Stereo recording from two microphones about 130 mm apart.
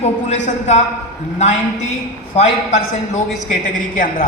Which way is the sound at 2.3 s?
60° left (ahead or behind).